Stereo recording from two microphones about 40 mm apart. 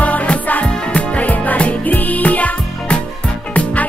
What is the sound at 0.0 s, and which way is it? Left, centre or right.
Music, left.